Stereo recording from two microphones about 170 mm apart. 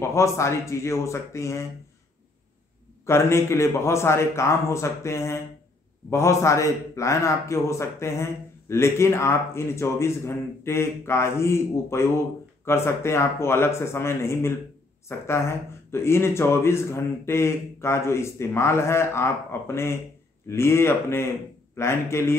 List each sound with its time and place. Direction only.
0.0 s a man's voice: 15° left (ahead or behind)
3.1 s a man's voice: 15° left (ahead or behind)